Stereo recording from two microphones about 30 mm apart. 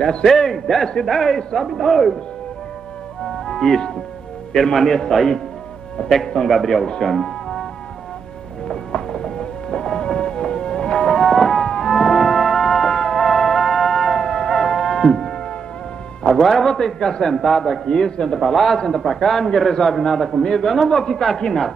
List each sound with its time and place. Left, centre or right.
0.0 s a man's voice: centre
0.3 s a man's voice: centre
3.4 s music: centre
4.7 s a man's voice: centre
7.1 s music: centre
8.9 s music: left
11.1 s music: centre
16.3 s a man's voice: centre
18.5 s a man's voice: centre
20.4 s a man's voice: centre